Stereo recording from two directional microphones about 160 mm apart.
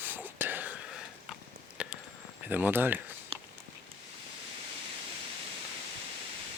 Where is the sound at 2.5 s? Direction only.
10° right (ahead or behind).